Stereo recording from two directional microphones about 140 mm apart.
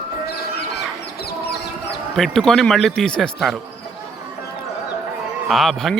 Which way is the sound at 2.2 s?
Centre (ahead or behind).